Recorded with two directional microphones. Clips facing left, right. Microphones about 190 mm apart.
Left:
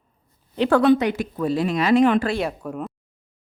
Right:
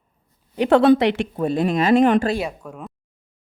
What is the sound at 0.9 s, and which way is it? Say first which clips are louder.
Speech: right 3 dB; 85° right.